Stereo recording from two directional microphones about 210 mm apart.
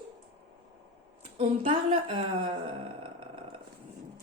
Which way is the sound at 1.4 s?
25° right (ahead or behind).